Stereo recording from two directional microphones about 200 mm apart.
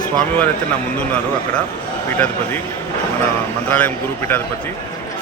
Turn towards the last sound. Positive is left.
turn(degrees=10)  # may be behind; listen again after turning